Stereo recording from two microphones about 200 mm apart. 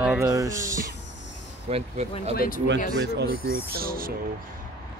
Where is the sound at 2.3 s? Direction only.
45° left (ahead or behind).